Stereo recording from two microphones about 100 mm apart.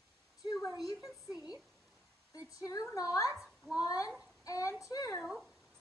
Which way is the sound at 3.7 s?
35° left (ahead or behind).